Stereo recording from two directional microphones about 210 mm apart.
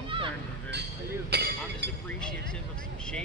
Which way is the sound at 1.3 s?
50° right (ahead or behind).